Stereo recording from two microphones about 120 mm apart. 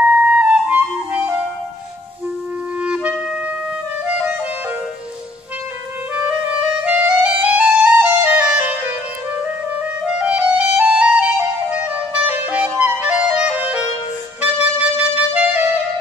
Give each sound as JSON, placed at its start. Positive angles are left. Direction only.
{"t": 0.0, "sound": "clarinet", "side_deg": -10}
{"t": 2.8, "sound": "clarinet", "side_deg": -10}
{"t": 6.9, "sound": "clarinet", "side_deg": -10}
{"t": 10.0, "sound": "clarinet", "side_deg": -10}
{"t": 14.4, "sound": "music", "side_deg": -10}